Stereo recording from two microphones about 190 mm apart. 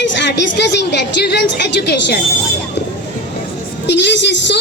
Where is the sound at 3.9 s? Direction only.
65° left (ahead or behind).